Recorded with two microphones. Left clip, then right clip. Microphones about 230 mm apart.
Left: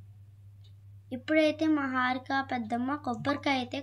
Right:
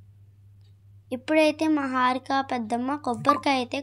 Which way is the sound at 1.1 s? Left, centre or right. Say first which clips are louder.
Right 5 dB; right.